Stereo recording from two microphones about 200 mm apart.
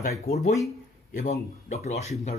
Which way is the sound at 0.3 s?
50° left (ahead or behind).